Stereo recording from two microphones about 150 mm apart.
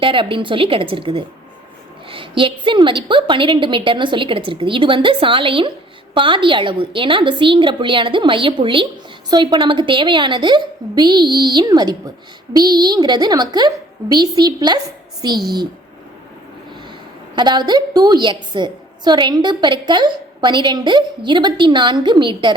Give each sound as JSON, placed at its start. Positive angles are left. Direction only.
{"t": 0.0, "sound": "a woman's voice", "side_deg": -35}
{"t": 17.3, "sound": "a woman's voice", "side_deg": -30}